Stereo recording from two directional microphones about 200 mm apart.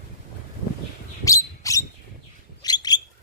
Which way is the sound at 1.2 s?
15° left (ahead or behind).